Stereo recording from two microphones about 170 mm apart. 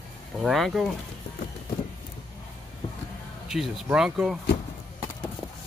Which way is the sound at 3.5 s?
Centre (ahead or behind).